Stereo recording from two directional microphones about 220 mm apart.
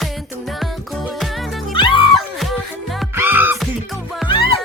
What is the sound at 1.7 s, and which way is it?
Music, 25° left (ahead or behind).